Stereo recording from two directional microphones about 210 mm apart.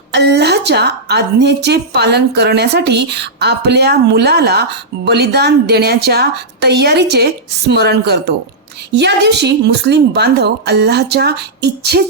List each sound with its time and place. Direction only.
0.1 s a woman's voice: 55° right (ahead or behind)